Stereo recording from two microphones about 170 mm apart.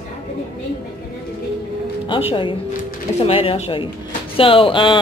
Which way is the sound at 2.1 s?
30° left (ahead or behind).